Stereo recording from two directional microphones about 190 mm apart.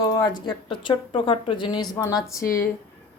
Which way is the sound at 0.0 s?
20° left (ahead or behind).